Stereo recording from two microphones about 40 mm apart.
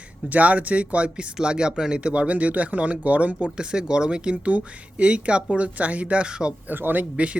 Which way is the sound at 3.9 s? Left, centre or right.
Right.